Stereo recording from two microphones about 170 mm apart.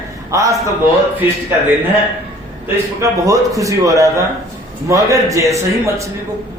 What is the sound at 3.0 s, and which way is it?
A man's voice, 20° right (ahead or behind).